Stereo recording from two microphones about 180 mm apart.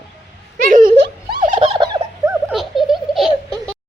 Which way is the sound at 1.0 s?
50° right (ahead or behind).